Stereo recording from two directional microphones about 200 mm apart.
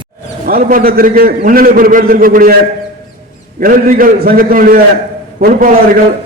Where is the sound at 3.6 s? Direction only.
45° right (ahead or behind).